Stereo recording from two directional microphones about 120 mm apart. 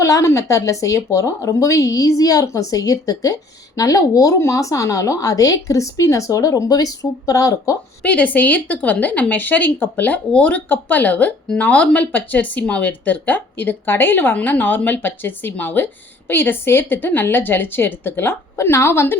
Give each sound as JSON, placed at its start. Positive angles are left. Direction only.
{"t": 0.0, "sound": "speech", "side_deg": 25}
{"t": 8.0, "sound": "speech", "side_deg": 15}